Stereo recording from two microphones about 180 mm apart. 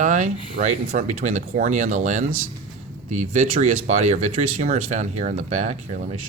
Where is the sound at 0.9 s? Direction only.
45° right (ahead or behind).